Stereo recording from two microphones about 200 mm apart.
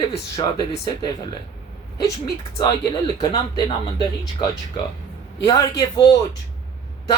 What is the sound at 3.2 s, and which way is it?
Speech, 20° left (ahead or behind).